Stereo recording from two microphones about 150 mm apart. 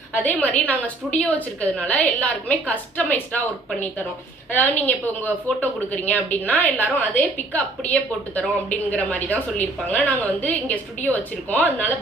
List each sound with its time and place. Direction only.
0.1 s a woman's voice: 10° left (ahead or behind)